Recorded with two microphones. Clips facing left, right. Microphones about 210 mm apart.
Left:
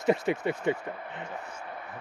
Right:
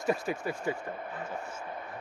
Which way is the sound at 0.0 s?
20° left (ahead or behind).